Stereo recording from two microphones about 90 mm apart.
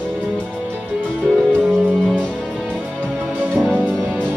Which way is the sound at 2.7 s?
20° right (ahead or behind).